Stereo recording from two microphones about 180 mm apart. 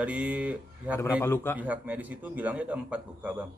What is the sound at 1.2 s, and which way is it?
Speech, 10° left (ahead or behind).